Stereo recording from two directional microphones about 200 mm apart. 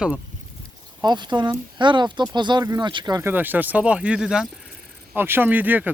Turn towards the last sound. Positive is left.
turn(degrees=-10)  # may be behind; listen again after turning